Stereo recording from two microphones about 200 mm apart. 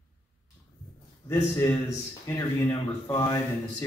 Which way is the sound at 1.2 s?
10° left (ahead or behind).